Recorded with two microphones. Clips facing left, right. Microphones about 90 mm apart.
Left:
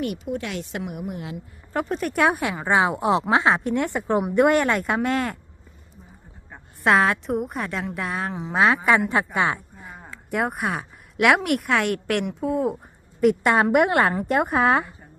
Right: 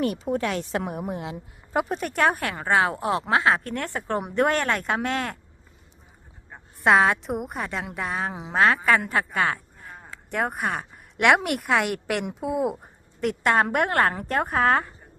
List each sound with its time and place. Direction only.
0.0 s speech: 35° right (ahead or behind)
1.7 s speech: 5° right (ahead or behind); by 4.2 s 15° left (ahead or behind)
4.2 s a woman's voice: 5° left (ahead or behind)
6.5 s a woman's voice: centre (ahead or behind)
8.5 s a woman's voice: 15° left (ahead or behind)